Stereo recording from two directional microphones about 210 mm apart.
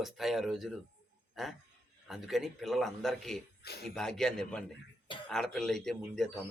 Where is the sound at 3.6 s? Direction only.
50° left (ahead or behind).